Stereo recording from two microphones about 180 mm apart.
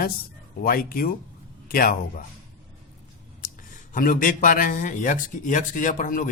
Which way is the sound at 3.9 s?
50° left (ahead or behind).